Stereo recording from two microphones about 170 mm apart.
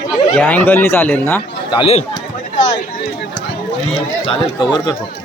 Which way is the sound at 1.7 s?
35° left (ahead or behind).